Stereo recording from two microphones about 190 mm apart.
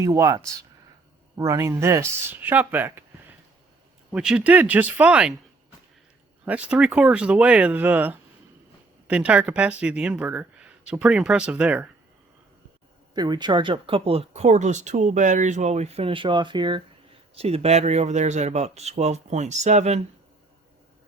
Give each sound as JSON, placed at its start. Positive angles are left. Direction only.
{"t": 0.0, "sound": "speech", "side_deg": -15}
{"t": 4.1, "sound": "speech", "side_deg": -5}
{"t": 6.4, "sound": "speech", "side_deg": -5}
{"t": 13.1, "sound": "speech", "side_deg": -20}